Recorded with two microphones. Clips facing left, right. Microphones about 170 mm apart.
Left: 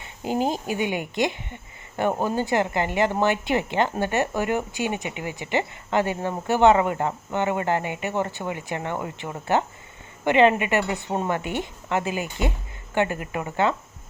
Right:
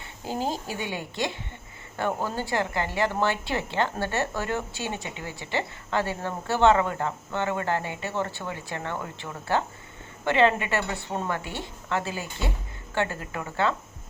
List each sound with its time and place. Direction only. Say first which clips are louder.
0.0 s speech: left 5 dB; 15° left (ahead or behind)